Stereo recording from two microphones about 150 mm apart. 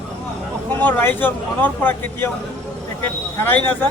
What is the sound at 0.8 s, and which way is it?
Speech, 10° left (ahead or behind).